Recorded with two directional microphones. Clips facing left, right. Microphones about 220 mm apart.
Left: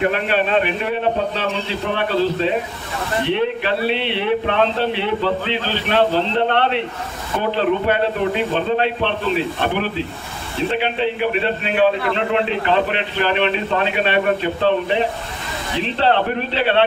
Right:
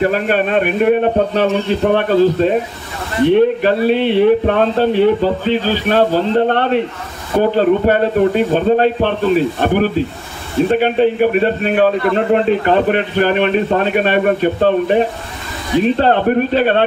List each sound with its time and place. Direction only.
0.0 s a man's voice: 45° right (ahead or behind)